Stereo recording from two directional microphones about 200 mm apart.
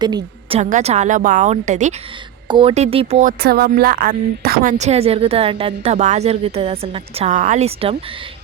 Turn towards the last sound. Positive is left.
turn(degrees=-30)  # may be behind; listen again after turning